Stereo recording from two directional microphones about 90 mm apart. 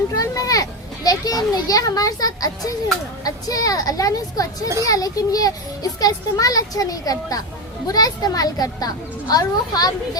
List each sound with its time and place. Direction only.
0.1 s a child's voice: 40° left (ahead or behind)